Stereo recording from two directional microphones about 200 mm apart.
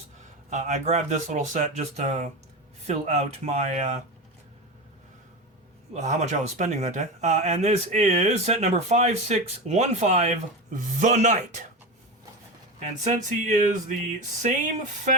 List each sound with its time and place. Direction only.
0.5 s speech: 35° right (ahead or behind)
5.9 s speech: 35° right (ahead or behind)
12.8 s speech: 35° right (ahead or behind)